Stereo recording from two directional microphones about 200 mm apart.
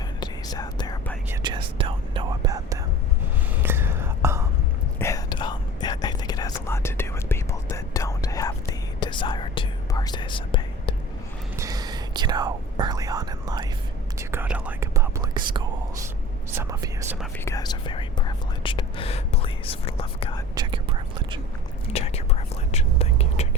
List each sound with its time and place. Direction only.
0.2 s whispering: 20° left (ahead or behind)
1.3 s speech: 20° right (ahead or behind)
3.5 s whispering: 10° right (ahead or behind)
4.9 s whispering: 15° left (ahead or behind)
11.5 s whispering: 15° right (ahead or behind)
16.5 s speech: 15° right (ahead or behind)
17.4 s speech: 20° left (ahead or behind)
20.6 s speech: 25° right (ahead or behind)
21.9 s whispering: 30° left (ahead or behind)